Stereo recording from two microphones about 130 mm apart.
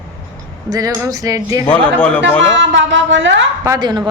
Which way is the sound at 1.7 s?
10° left (ahead or behind).